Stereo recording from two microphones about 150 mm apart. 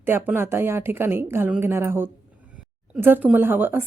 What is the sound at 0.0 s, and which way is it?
A woman's voice, 15° right (ahead or behind).